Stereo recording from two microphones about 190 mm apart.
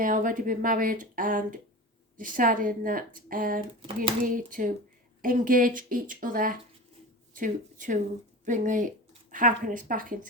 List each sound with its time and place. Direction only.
0.0 s speech: 45° right (ahead or behind)
3.8 s speech: 30° right (ahead or behind)
4.3 s speech: 45° right (ahead or behind)